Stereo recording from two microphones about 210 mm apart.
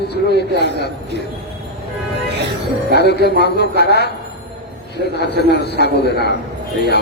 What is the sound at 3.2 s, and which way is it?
Speech, 50° left (ahead or behind).